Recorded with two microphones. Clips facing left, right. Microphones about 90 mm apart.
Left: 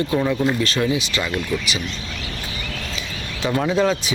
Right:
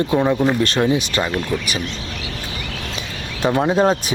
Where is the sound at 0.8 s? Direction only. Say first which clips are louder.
Right 3 dB; 40° right (ahead or behind).